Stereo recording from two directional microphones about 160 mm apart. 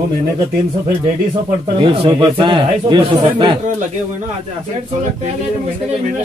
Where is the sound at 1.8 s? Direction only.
30° right (ahead or behind).